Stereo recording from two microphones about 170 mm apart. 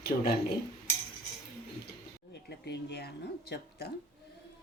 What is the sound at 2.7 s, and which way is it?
Speech, 80° left.